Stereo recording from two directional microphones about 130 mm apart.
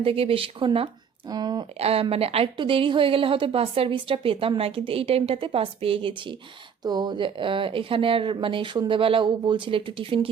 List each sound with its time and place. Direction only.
0.0 s a woman's voice: 45° right (ahead or behind)
1.8 s a woman's voice: 50° right (ahead or behind)